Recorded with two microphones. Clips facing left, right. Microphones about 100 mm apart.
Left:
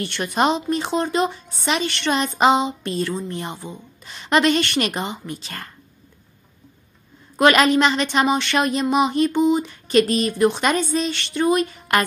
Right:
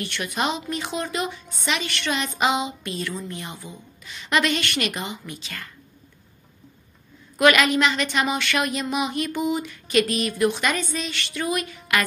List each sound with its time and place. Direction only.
0.0 s a woman's voice: 35° left (ahead or behind)
7.3 s a woman's voice: 35° left (ahead or behind)